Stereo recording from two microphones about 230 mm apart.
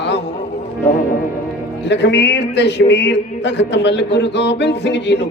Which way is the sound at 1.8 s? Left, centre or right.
Left.